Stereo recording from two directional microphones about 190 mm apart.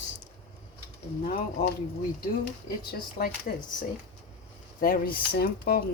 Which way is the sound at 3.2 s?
50° left (ahead or behind).